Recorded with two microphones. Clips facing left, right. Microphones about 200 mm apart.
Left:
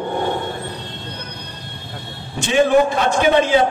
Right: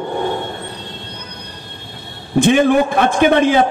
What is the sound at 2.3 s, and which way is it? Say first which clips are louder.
A man's voice: right 3 dB; 55° right (ahead or behind).